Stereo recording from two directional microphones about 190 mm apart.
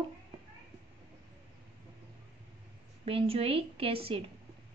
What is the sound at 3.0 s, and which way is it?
A woman's voice, 30° right (ahead or behind).